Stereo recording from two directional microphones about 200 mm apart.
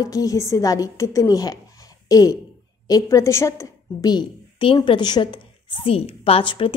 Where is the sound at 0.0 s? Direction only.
15° left (ahead or behind).